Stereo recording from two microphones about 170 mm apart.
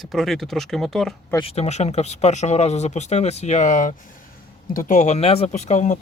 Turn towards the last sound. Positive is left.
turn(degrees=45)  # may be behind; listen again after turning